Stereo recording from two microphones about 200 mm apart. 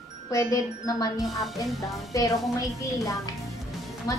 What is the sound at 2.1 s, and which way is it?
A woman's voice, 15° left (ahead or behind).